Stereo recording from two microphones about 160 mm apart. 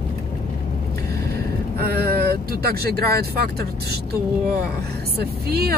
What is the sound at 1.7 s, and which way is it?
Speech, 75° right (ahead or behind).